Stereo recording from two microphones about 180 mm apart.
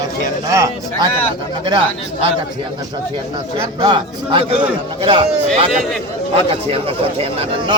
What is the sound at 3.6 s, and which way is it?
A man's voice, 25° right (ahead or behind).